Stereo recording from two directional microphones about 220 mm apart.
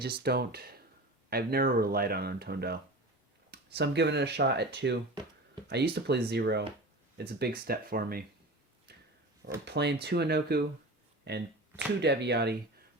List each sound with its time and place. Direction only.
0.0 s speech: 45° right (ahead or behind)
9.6 s speech: 50° right (ahead or behind)
11.9 s speech: 50° right (ahead or behind)